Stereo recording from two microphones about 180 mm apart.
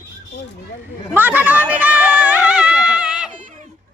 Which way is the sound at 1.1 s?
10° right (ahead or behind).